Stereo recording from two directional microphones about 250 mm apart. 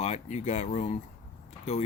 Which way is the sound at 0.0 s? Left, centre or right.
Left.